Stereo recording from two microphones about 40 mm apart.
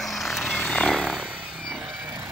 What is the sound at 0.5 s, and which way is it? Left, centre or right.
Chainsaw, centre.